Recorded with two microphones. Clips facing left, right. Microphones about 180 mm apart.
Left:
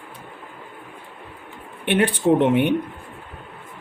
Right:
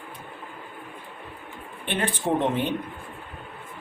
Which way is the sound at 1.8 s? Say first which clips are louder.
Left 8 dB; 70° left (ahead or behind).